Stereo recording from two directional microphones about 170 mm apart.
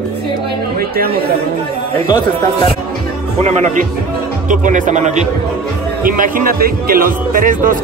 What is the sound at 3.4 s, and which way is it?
A man's voice, 45° right (ahead or behind).